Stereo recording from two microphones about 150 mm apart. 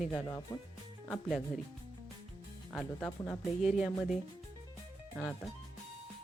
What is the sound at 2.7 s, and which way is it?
Speech, 5° left (ahead or behind).